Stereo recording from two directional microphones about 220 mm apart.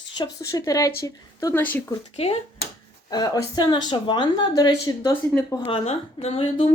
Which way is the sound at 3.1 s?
15° left (ahead or behind).